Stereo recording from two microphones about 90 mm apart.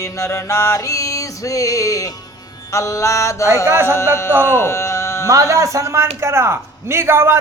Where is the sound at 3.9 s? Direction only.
30° left (ahead or behind).